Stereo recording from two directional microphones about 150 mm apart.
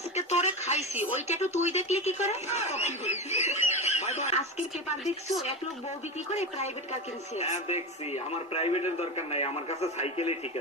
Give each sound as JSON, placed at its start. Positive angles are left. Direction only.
{"t": 0.2, "sound": "speech", "side_deg": 50}
{"t": 6.3, "sound": "speech", "side_deg": 50}